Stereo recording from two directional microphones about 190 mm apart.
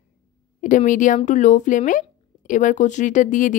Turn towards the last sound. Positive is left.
turn(degrees=45)  # may be behind; listen again after turning